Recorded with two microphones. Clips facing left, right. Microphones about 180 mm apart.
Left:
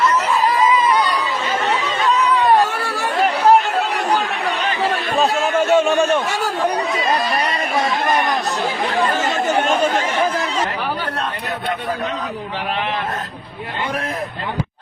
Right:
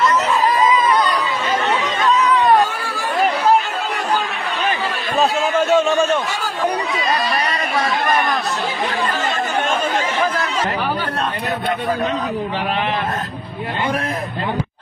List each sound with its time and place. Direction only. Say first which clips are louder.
0.0 s a sound: right 1 dB; 10° left (ahead or behind)
5.5 s a man's voice: left 1 dB; 10° left (ahead or behind)
7.8 s a man's voice: even; 20° left (ahead or behind)